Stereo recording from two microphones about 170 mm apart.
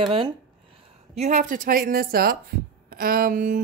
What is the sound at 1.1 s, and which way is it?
A woman's voice, 45° right (ahead or behind).